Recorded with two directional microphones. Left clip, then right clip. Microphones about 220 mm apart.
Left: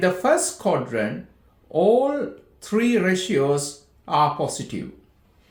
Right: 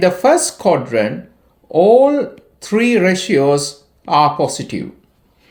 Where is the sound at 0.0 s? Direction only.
35° right (ahead or behind).